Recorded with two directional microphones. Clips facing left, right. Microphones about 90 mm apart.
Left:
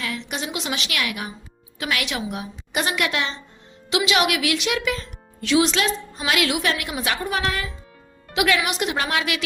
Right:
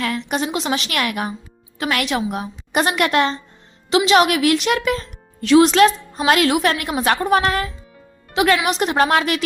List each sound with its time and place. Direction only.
0.0 s a woman's voice: 50° right (ahead or behind)
3.8 s a woman's voice: 35° right (ahead or behind)